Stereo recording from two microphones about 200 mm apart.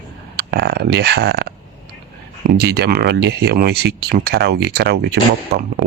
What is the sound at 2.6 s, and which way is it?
Speech, 55° right (ahead or behind).